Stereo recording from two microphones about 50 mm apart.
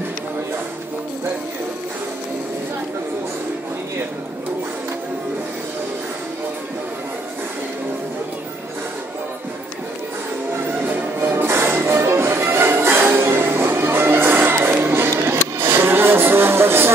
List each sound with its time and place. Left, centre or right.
10.5 s music: right